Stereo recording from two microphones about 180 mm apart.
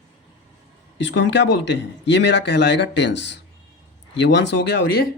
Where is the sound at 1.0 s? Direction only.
85° left.